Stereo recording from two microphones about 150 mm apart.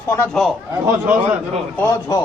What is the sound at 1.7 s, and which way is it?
Speech, 20° left (ahead or behind).